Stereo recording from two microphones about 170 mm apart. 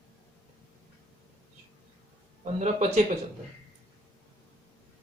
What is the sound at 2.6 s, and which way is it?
Speech, 40° right (ahead or behind).